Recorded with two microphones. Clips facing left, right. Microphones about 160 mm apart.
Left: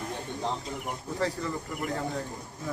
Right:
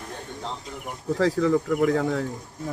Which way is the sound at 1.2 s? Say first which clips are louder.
Right 11 dB; 90° right.